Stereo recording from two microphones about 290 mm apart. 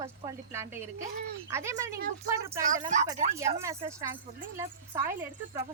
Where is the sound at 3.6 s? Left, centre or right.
Centre.